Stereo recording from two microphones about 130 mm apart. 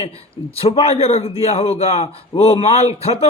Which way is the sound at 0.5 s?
50° left (ahead or behind).